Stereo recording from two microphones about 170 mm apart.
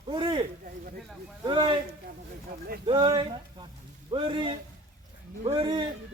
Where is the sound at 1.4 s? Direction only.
30° right (ahead or behind).